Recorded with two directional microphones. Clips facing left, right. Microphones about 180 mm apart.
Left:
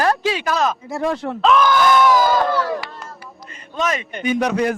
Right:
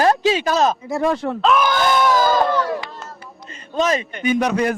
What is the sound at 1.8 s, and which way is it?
Crowd, 30° right (ahead or behind).